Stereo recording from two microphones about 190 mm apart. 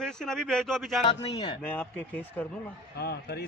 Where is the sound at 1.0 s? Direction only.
25° left (ahead or behind).